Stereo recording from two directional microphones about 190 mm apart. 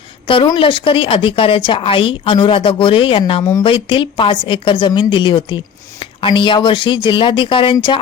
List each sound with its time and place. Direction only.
0.3 s speech: 25° left (ahead or behind)